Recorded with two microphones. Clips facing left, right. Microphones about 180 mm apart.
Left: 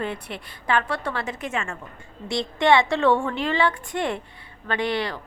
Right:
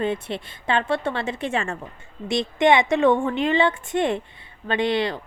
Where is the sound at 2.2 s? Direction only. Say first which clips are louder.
Right 2 dB; 20° right (ahead or behind).